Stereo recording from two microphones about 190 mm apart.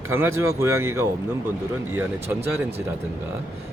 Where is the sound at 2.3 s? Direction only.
10° right (ahead or behind).